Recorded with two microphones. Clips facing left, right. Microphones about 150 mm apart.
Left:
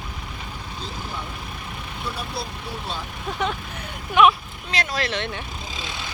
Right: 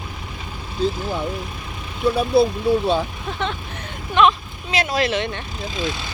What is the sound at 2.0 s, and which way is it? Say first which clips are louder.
Speech: right 14 dB; 55° right (ahead or behind).